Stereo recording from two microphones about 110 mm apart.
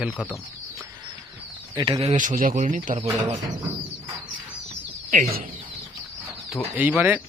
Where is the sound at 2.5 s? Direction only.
90° right.